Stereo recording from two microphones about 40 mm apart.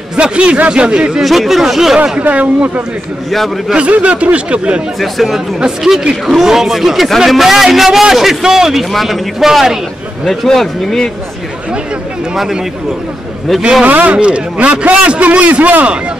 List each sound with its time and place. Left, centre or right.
0.1 s a man's voice: right
1.2 s speech: centre
2.2 s a man's voice: right
3.3 s speech: centre
3.7 s a man's voice: right
5.0 s speech: centre
6.2 s a man's voice: centre
10.2 s speech: centre
13.8 s a man's voice: right
14.1 s a man's voice: right